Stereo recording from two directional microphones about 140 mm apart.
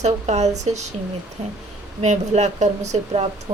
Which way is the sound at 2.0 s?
55° right (ahead or behind).